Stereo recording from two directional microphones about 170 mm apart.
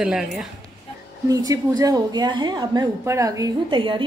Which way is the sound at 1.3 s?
20° right (ahead or behind).